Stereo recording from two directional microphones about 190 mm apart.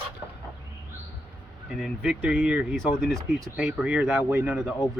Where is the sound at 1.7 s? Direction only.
5° right (ahead or behind).